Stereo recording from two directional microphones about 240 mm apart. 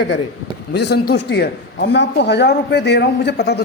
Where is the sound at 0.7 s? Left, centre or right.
Left.